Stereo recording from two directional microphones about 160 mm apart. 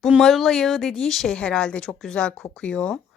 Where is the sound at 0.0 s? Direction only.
Centre (ahead or behind).